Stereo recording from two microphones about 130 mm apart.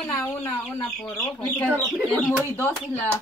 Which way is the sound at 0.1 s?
25° left (ahead or behind).